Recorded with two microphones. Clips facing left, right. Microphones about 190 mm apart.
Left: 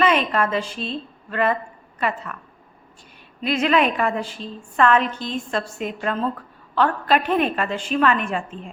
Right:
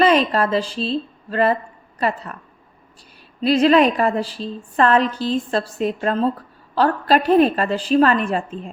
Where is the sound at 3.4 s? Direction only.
35° right (ahead or behind).